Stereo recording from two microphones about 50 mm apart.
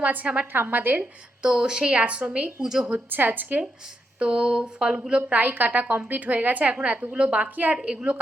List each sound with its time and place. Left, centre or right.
0.0 s a woman's voice: right
0.5 s a woman's voice: right
1.4 s a woman's voice: centre
2.6 s speech: centre
3.1 s a woman's voice: right
4.2 s a woman's voice: right
5.4 s a woman's voice: right
7.8 s speech: centre